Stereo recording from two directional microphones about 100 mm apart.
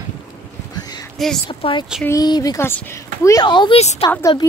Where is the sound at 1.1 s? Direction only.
5° left (ahead or behind).